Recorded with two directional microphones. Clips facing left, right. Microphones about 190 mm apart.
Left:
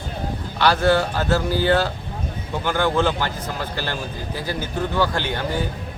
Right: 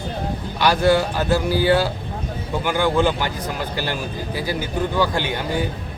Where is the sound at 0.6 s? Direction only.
15° right (ahead or behind).